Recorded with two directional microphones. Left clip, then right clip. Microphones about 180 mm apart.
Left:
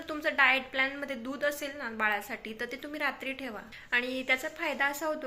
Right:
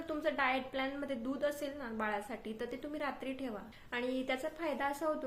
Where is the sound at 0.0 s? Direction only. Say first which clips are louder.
Left 8 dB; 5° right (ahead or behind).